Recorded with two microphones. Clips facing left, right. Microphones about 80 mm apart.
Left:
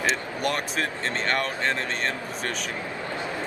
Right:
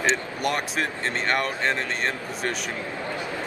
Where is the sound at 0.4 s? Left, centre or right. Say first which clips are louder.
Right 1 dB; centre.